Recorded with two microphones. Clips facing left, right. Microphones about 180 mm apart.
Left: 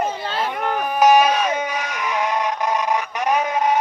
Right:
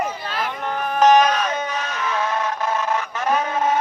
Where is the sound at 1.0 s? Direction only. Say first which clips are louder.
Even; 10° left (ahead or behind).